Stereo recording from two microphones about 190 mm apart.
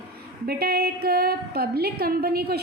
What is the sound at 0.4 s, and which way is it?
A woman's voice, 55° right (ahead or behind).